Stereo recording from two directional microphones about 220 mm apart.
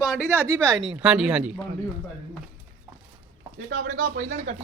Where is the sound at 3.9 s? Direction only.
35° right (ahead or behind).